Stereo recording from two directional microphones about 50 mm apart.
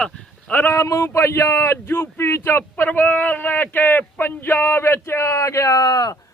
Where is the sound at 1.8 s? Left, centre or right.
Left.